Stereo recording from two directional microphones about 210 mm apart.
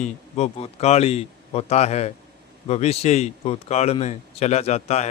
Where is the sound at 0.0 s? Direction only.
30° left (ahead or behind).